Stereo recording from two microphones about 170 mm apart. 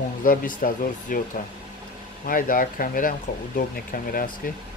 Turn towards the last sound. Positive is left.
turn(degrees=55)  # may be behind; listen again after turning